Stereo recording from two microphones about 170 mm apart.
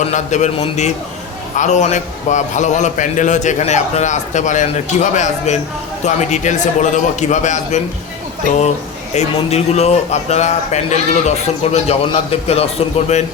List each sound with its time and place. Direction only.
0.0 s a man's voice: 45° left (ahead or behind)